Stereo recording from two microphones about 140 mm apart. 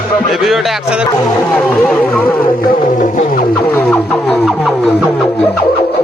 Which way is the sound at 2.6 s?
80° left.